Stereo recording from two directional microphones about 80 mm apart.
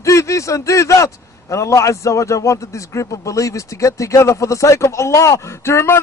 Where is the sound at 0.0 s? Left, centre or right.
Left.